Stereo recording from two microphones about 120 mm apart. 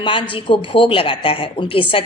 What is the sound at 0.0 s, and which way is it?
A woman's voice, 45° left (ahead or behind).